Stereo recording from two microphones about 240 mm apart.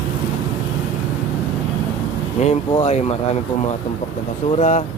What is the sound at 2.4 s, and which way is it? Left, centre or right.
Speech, left.